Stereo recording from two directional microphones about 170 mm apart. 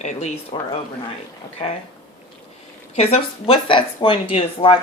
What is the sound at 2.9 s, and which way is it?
Speech, 35° left (ahead or behind).